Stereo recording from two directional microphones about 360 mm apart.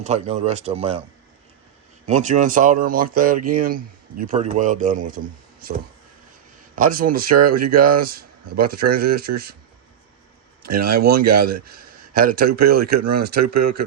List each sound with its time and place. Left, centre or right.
0.0 s speech: centre
2.0 s speech: centre
6.7 s speech: right
10.6 s speech: right